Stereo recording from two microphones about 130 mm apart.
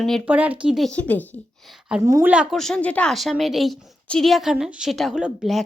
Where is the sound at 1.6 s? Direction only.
5° right (ahead or behind).